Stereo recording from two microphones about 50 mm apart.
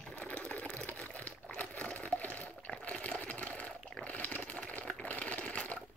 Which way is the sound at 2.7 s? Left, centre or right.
Left.